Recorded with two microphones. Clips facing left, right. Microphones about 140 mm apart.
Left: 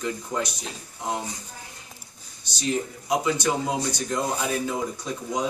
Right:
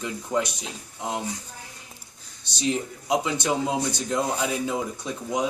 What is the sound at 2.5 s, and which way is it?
Speech, 20° right (ahead or behind).